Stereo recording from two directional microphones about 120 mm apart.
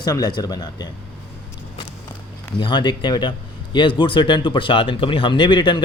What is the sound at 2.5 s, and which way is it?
Speech, 40° left (ahead or behind).